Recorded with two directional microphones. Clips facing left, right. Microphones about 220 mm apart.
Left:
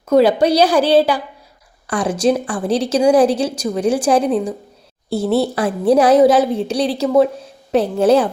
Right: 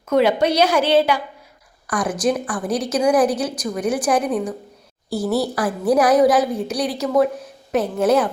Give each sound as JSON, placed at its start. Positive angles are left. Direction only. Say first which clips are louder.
{"t": 0.1, "sound": "a woman's voice", "louder": "left 4 dB", "side_deg": 35}